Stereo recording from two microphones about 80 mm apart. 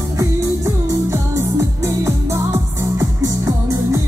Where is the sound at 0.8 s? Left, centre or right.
Right.